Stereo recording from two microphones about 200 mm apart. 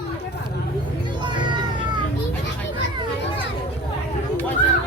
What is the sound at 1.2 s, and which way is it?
Cat, 20° right (ahead or behind).